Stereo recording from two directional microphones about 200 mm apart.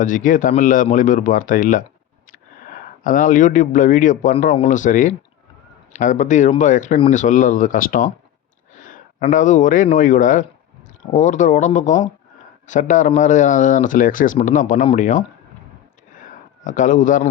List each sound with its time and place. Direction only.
0.0 s speech: 40° left (ahead or behind)
3.0 s speech: 40° left (ahead or behind)
16.1 s a sound: 40° left (ahead or behind)